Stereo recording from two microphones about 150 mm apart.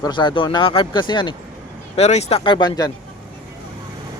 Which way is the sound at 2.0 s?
45° left (ahead or behind).